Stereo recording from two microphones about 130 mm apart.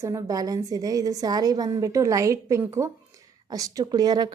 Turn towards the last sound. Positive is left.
turn(degrees=-30)  # may be behind; listen again after turning